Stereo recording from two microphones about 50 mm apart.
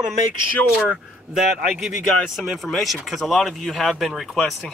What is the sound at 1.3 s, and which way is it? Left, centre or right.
Speech, centre.